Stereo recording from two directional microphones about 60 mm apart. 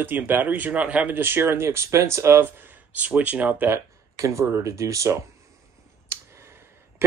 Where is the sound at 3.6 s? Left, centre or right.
Right.